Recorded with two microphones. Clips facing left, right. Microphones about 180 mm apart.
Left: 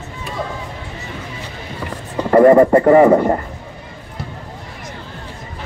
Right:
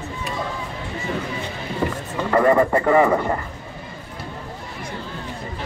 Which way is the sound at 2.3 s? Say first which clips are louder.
Left 8 dB; 35° left (ahead or behind).